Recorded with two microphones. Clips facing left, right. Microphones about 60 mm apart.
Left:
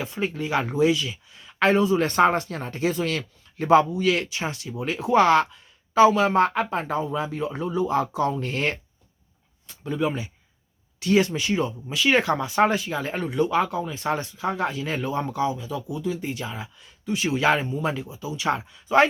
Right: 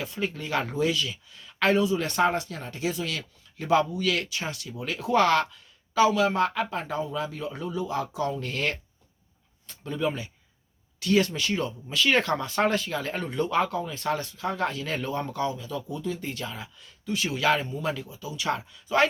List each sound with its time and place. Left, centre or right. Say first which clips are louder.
0.0 s speech: left 4 dB; left
9.6 s speech: left 3 dB; centre